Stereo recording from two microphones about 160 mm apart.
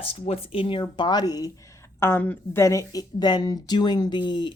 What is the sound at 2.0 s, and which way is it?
Speech, 10° left (ahead or behind).